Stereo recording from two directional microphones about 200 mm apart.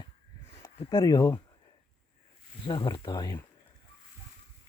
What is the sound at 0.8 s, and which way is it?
Speech, 20° left (ahead or behind).